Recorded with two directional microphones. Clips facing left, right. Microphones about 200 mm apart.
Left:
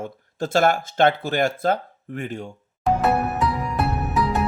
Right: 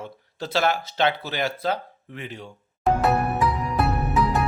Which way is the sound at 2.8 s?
Centre (ahead or behind).